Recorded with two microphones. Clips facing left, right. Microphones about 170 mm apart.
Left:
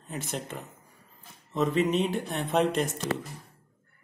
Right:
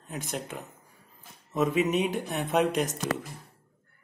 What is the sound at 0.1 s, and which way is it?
Speech, centre (ahead or behind).